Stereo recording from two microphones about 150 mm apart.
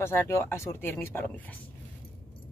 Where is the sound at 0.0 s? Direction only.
15° left (ahead or behind).